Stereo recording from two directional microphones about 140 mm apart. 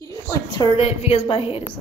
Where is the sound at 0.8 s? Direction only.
50° left (ahead or behind).